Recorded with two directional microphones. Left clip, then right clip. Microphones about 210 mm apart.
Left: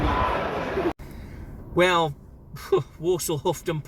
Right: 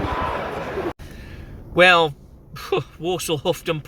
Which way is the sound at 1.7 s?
15° right (ahead or behind).